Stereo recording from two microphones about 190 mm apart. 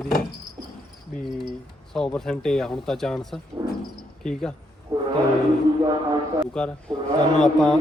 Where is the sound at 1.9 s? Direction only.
Centre (ahead or behind).